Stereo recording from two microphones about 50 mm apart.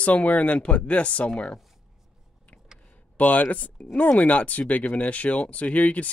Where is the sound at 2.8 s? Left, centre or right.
Left.